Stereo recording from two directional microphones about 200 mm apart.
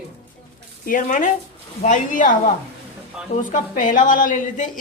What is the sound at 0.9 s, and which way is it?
A woman's voice, 40° left (ahead or behind).